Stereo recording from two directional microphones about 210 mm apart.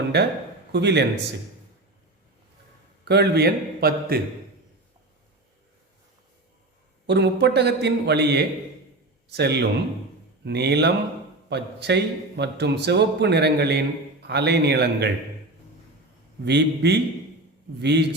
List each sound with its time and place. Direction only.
0.1 s a man's voice: 50° right (ahead or behind)
3.0 s a man's voice: 50° right (ahead or behind)
7.1 s a man's voice: 55° right (ahead or behind)
16.4 s a man's voice: 55° right (ahead or behind)